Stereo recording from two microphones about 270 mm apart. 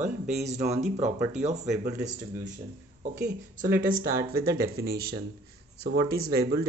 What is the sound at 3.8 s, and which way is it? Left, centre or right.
Speech, right.